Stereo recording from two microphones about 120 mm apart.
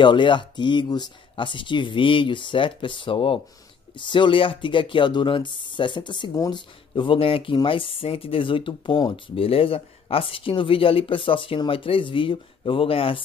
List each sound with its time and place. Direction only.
0.0 s speech: 40° left (ahead or behind)